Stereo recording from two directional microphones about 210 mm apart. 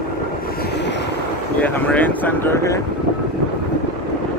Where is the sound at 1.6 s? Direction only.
5° left (ahead or behind).